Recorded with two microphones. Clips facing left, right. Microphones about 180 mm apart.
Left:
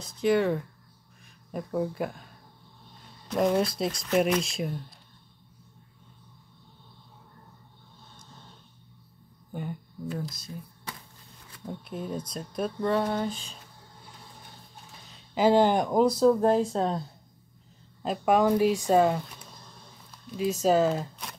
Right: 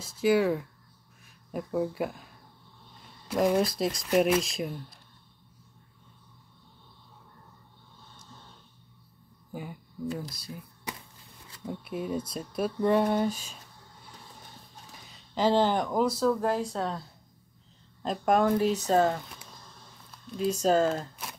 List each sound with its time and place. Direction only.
0.0 s speech: 5° right (ahead or behind)
3.3 s speech: 5° right (ahead or behind)
9.5 s speech: 5° right (ahead or behind)
15.1 s speech: 10° left (ahead or behind)
18.0 s speech: 5° left (ahead or behind)